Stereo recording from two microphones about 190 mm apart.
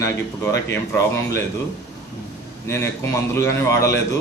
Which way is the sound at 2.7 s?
15° left (ahead or behind).